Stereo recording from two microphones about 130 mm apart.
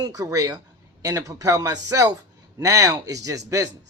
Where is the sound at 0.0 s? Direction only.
30° right (ahead or behind).